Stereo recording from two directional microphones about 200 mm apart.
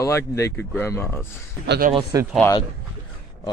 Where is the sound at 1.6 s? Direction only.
50° right (ahead or behind).